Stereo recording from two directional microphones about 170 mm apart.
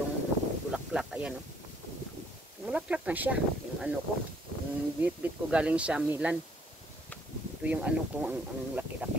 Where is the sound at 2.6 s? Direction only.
5° right (ahead or behind).